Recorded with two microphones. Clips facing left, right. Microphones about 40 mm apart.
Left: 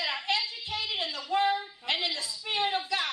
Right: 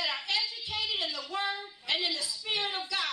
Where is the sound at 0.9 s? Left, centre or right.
Left.